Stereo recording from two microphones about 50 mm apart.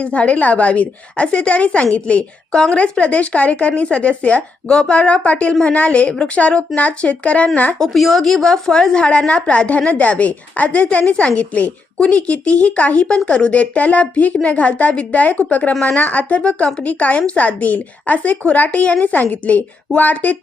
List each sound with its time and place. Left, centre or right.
0.0 s speech: left
7.8 s a woman's voice: centre; by 20.3 s left